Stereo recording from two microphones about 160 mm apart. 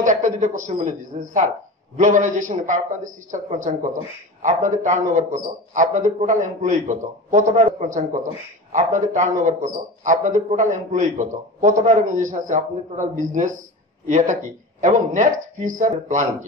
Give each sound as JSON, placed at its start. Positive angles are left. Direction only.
{"t": 0.0, "sound": "a man's voice", "side_deg": -50}